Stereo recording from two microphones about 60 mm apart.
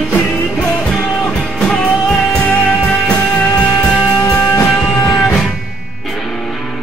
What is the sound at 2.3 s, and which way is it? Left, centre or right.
Music, centre.